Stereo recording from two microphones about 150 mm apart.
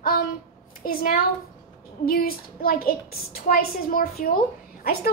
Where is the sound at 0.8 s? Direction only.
70° left (ahead or behind).